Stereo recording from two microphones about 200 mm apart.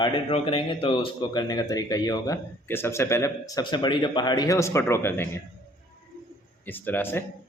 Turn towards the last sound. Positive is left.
turn(degrees=10)  # may be behind; listen again after turning